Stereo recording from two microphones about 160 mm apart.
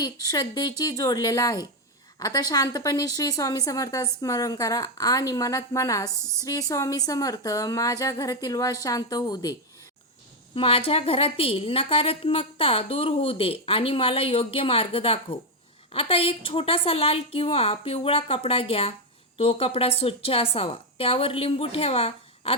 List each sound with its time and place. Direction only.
0.0 s a woman's voice: 25° left (ahead or behind)
10.5 s a woman's voice: 35° left (ahead or behind)